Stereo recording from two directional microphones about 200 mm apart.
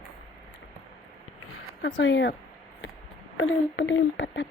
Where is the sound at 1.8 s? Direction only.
70° left (ahead or behind).